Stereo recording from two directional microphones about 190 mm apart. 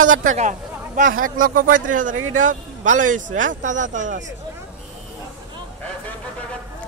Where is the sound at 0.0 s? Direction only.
45° right (ahead or behind).